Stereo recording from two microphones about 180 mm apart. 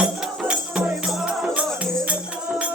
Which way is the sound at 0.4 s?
5° right (ahead or behind).